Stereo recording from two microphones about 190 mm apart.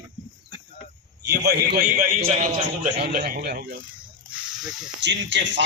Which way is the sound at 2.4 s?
45° right (ahead or behind).